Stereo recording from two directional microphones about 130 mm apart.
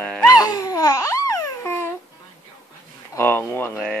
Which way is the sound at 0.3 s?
30° left (ahead or behind).